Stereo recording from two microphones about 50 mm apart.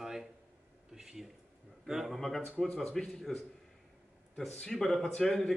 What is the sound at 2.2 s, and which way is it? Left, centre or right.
A man's voice, centre.